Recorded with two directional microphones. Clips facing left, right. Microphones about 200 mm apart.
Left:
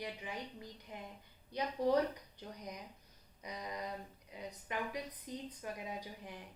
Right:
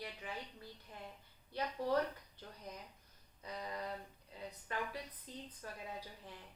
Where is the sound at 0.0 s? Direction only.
15° left (ahead or behind).